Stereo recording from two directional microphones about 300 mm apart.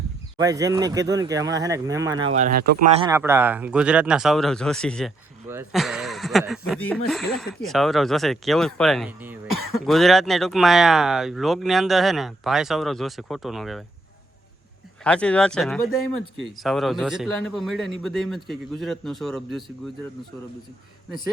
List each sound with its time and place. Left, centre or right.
0.3 s speech: centre
2.3 s speech: right
3.1 s speech: centre
15.0 s speech: centre